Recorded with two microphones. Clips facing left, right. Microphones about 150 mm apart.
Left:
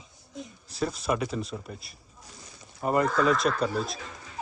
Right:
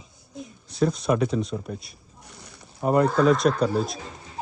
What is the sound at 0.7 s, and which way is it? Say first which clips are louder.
Speech: right 6 dB; centre (ahead or behind).